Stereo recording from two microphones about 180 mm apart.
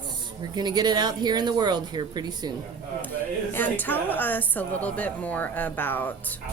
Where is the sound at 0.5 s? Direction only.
20° right (ahead or behind).